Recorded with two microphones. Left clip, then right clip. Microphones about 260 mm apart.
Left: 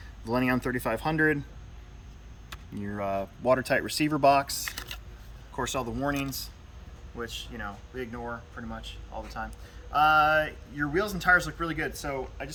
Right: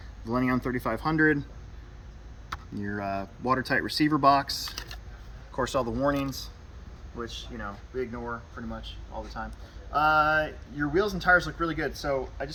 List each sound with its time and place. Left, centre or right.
0.3 s speech: centre
2.8 s speech: centre